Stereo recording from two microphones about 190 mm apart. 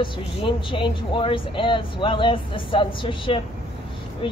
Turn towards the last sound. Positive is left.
turn(degrees=25)  # may be behind; listen again after turning